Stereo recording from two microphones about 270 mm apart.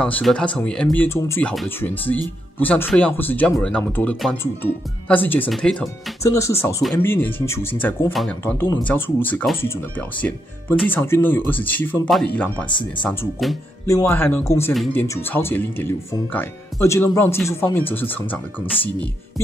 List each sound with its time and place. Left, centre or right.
0.0 s speech: centre
12.6 s speech: centre
13.0 s speech: centre